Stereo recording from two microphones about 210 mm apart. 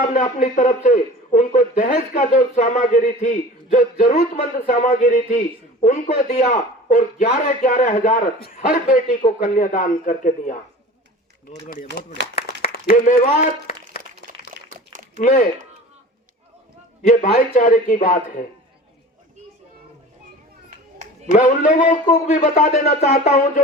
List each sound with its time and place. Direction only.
0.0 s a man's voice: 35° left (ahead or behind)
11.7 s a man's voice: 40° left (ahead or behind)
14.3 s a sound: 40° right (ahead or behind)
15.2 s a man's voice: 35° left (ahead or behind)
17.1 s a man's voice: 35° left (ahead or behind)
20.7 s a sound: 35° right (ahead or behind)
21.3 s a man's voice: 40° left (ahead or behind)